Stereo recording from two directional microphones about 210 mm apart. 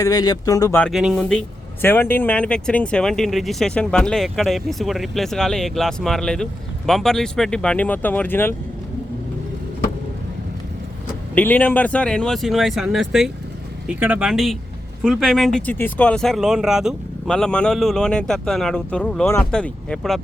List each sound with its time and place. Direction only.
0.0 s speech: 15° left (ahead or behind)
0.9 s speech: centre (ahead or behind)
11.3 s speech: 10° left (ahead or behind)